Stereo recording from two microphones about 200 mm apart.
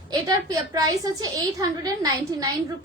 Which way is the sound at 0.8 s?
20° right (ahead or behind).